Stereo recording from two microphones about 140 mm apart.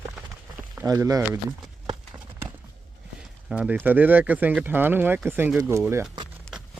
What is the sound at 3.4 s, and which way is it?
Speech, 5° right (ahead or behind).